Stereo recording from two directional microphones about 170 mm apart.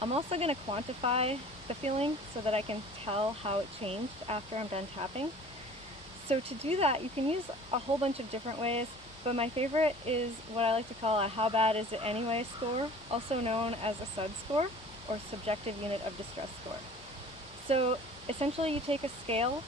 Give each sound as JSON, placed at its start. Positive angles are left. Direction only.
{"t": 0.0, "sound": "speech", "side_deg": -35}
{"t": 6.2, "sound": "speech", "side_deg": -35}
{"t": 17.7, "sound": "speech", "side_deg": -35}